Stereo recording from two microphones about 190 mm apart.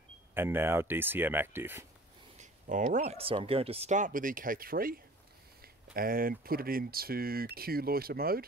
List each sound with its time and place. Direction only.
0.3 s speech: 10° right (ahead or behind)
2.3 s speech: 40° right (ahead or behind)